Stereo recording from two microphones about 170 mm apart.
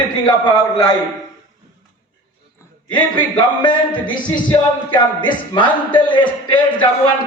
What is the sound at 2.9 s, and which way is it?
Speech, 30° left (ahead or behind).